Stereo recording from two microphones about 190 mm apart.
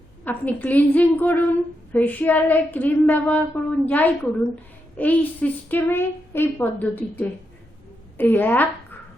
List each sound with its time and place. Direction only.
0.3 s child singing: 10° left (ahead or behind)